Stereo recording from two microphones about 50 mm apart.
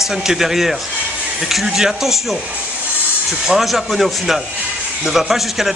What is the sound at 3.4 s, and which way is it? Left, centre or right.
A man's voice, centre.